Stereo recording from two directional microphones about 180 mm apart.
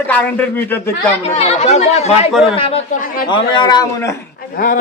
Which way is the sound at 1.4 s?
35° left (ahead or behind).